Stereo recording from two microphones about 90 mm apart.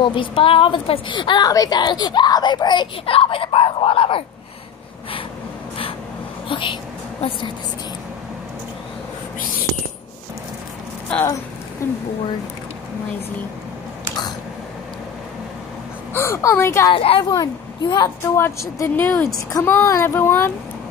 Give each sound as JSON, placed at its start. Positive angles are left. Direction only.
{"t": 0.0, "sound": "a woman's voice", "side_deg": 70}
{"t": 1.5, "sound": "a child's voice", "side_deg": 45}
{"t": 6.5, "sound": "a woman's voice", "side_deg": 70}
{"t": 11.8, "sound": "a woman's voice", "side_deg": 30}
{"t": 16.1, "sound": "a woman's voice", "side_deg": 25}
{"t": 16.9, "sound": "a woman's voice", "side_deg": 90}
{"t": 17.2, "sound": "a woman's voice", "side_deg": 45}